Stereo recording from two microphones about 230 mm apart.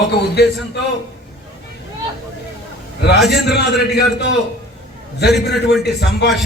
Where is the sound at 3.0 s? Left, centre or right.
Left.